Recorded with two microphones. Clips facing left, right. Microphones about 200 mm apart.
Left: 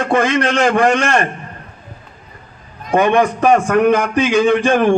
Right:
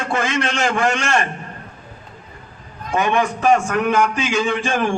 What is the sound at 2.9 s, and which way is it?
Speech, 55° left (ahead or behind).